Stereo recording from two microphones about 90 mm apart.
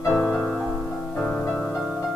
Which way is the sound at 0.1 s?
20° left (ahead or behind).